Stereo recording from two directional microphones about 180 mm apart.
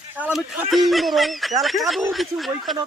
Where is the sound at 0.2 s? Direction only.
5° right (ahead or behind).